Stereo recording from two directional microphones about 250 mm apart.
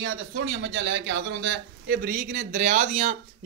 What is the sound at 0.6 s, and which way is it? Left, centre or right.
A man's voice, right.